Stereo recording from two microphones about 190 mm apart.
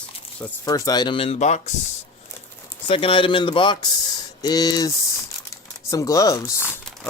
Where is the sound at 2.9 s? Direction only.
30° left (ahead or behind).